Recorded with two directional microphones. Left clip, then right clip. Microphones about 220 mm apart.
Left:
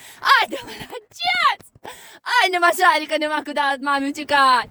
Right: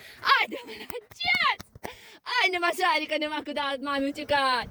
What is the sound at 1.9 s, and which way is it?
A woman's voice, 45° left (ahead or behind).